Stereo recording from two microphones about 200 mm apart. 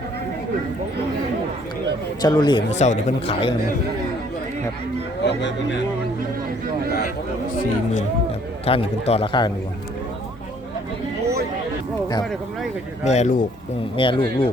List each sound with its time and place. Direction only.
2.2 s a man's voice: 20° left (ahead or behind)
2.7 s speech: 35° left (ahead or behind)
5.2 s speech: 60° left (ahead or behind)
8.6 s a man's voice: 30° left (ahead or behind)
13.1 s a man's voice: 35° left (ahead or behind)